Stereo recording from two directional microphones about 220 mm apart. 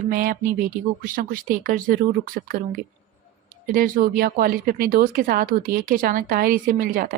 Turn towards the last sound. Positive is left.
turn(degrees=-40)  # may be behind; listen again after turning